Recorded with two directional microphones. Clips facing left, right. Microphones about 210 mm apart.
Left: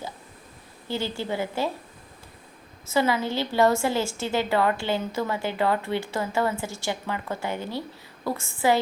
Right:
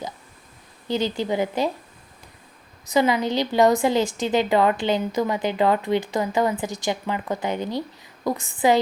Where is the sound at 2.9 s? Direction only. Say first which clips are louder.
Right 3 dB; 15° right (ahead or behind).